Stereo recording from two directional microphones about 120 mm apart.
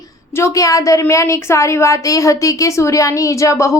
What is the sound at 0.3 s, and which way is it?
A woman's voice, 25° left (ahead or behind).